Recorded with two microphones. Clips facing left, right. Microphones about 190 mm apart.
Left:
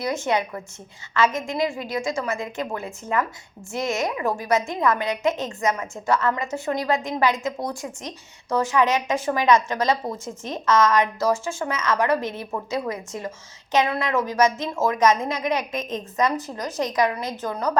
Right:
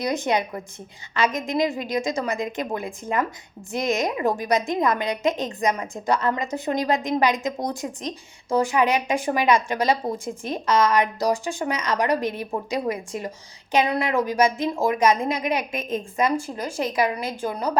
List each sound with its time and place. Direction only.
0.0 s a woman's voice: 15° right (ahead or behind)